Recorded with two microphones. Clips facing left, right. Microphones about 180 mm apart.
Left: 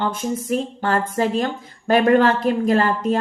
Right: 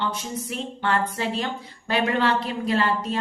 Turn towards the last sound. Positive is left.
turn(degrees=50)  # may be behind; listen again after turning